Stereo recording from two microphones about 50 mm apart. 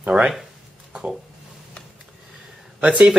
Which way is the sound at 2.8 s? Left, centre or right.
Right.